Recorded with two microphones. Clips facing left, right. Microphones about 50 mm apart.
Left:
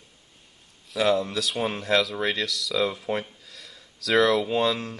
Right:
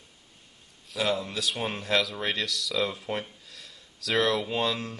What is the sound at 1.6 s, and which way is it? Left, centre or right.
Speech, left.